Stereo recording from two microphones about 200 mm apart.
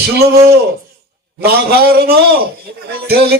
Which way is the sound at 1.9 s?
50° right (ahead or behind).